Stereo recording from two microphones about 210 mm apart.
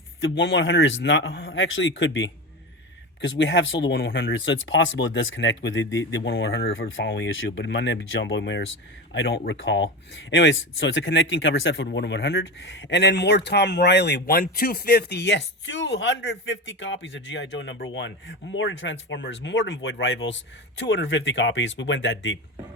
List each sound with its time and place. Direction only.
0.2 s speech: 55° left (ahead or behind)
6.7 s speech: 65° left (ahead or behind)